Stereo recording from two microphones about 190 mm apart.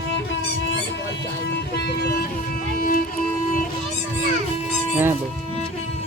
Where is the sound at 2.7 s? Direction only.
45° left (ahead or behind).